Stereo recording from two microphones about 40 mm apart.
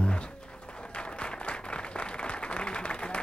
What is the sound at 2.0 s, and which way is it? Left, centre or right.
Applause, left.